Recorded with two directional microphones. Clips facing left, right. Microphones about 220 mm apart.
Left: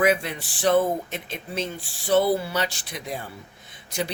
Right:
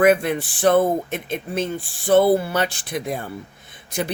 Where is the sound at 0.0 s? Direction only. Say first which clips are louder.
Right 6 dB; 55° right (ahead or behind).